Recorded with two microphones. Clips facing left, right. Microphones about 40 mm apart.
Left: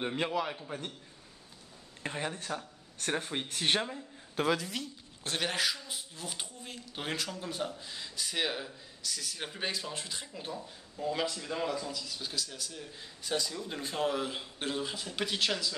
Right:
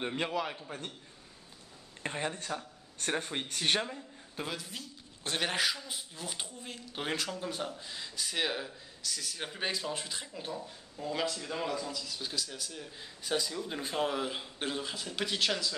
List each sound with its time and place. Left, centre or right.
0.0 s speech: centre
2.0 s speech: centre
4.4 s a woman's voice: left
5.2 s speech: centre